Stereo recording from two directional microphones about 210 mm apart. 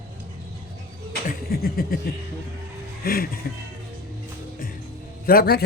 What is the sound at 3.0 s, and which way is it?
Speech, 45° left (ahead or behind).